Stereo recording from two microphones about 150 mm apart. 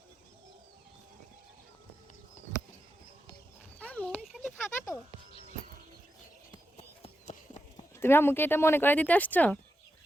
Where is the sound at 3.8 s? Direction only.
10° left (ahead or behind).